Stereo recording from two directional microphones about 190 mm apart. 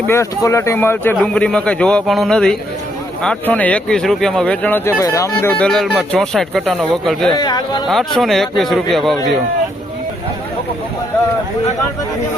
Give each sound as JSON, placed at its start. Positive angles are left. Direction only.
{"t": 0.1, "sound": "speech", "side_deg": 15}
{"t": 7.3, "sound": "speech", "side_deg": 20}
{"t": 7.9, "sound": "speech", "side_deg": 0}